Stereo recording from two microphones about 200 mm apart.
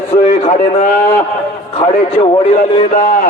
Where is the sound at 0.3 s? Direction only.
40° left (ahead or behind).